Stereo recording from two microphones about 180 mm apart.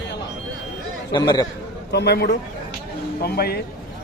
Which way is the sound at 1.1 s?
25° left (ahead or behind).